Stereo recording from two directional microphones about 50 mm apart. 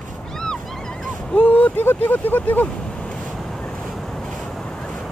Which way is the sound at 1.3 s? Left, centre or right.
Left.